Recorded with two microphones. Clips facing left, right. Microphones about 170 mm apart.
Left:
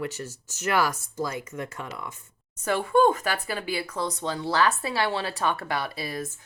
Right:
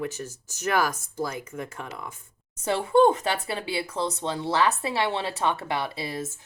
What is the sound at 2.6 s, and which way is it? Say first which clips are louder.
A woman's voice: right 2 dB; 25° right (ahead or behind).